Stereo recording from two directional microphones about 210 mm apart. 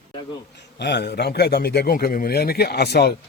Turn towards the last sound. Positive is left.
turn(degrees=50)  # may be behind; listen again after turning